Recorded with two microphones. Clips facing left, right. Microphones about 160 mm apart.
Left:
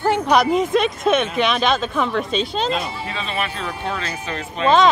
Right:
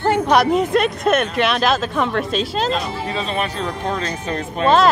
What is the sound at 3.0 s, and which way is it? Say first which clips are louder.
Speech: right 3 dB; 40° right (ahead or behind).